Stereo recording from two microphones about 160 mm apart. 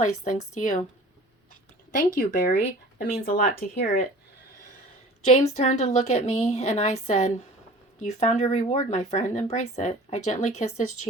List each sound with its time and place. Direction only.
0.0 s speech: 50° left (ahead or behind)
2.1 s speech: 65° left (ahead or behind)
5.3 s speech: 45° left (ahead or behind)